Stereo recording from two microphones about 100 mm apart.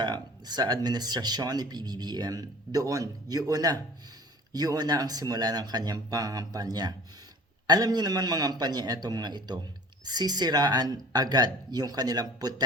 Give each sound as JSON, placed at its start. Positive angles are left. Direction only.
{"t": 0.0, "sound": "speech", "side_deg": -45}